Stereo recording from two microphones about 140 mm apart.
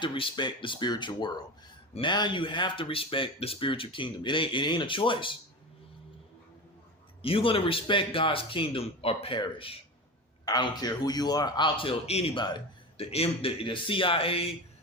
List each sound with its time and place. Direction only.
0.0 s speech: 35° left (ahead or behind)
7.2 s speech: 40° left (ahead or behind)
13.1 s speech: 45° left (ahead or behind)